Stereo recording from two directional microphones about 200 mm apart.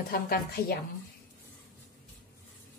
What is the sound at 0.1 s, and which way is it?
Speech, 50° left (ahead or behind).